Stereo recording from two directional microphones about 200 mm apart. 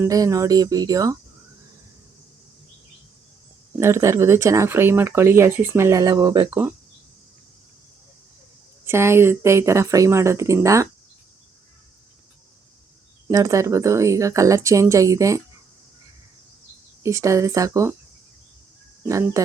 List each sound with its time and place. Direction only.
0.0 s speech: 15° right (ahead or behind)
3.8 s speech: 15° right (ahead or behind)
8.8 s speech: 10° right (ahead or behind)
13.2 s speech: 15° right (ahead or behind)
17.0 s speech: 15° right (ahead or behind)
19.0 s speech: 15° right (ahead or behind)